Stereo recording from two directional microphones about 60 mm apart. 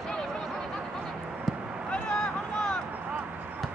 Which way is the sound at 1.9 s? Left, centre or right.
Centre.